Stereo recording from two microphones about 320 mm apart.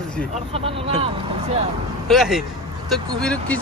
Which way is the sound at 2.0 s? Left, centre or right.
Centre.